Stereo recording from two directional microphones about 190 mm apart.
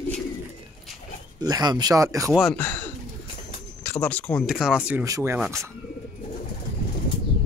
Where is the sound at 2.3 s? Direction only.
5° left (ahead or behind); by 5.4 s 15° right (ahead or behind).